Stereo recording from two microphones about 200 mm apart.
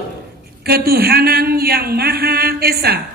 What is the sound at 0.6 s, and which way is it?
A man's voice, 50° right (ahead or behind).